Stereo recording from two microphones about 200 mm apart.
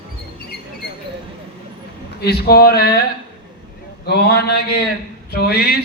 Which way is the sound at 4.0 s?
55° left (ahead or behind).